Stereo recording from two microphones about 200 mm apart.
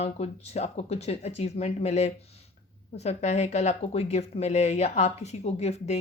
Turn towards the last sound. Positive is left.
turn(degrees=35)  # may be behind; listen again after turning